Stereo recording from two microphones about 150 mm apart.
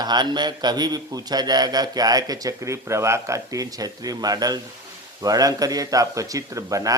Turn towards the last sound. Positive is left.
turn(degrees=-20)  # may be behind; listen again after turning